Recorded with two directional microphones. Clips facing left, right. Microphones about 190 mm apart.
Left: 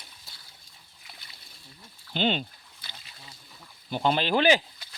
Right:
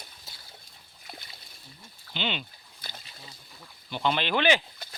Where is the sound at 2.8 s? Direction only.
45° right (ahead or behind).